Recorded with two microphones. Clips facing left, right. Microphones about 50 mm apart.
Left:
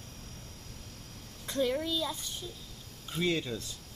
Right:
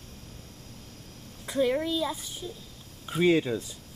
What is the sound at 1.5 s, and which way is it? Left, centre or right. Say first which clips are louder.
Speech: right 5 dB; centre.